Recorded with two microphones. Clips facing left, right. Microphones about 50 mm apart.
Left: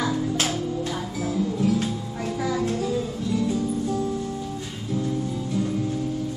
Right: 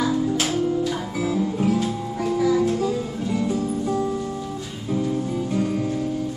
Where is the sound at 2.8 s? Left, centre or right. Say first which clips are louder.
Right 2 dB; right.